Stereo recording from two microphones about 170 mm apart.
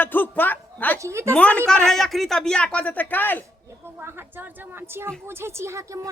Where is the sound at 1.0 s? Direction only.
15° right (ahead or behind).